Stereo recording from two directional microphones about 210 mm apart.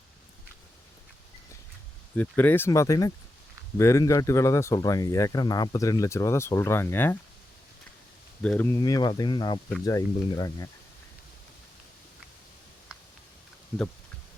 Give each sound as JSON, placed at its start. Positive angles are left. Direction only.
{"t": 2.1, "sound": "speech", "side_deg": 10}
{"t": 8.4, "sound": "speech", "side_deg": 5}